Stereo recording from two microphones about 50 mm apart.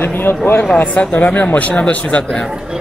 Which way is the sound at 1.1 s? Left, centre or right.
Left.